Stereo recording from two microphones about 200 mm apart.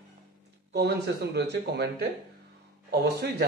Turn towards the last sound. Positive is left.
turn(degrees=-55)  # may be behind; listen again after turning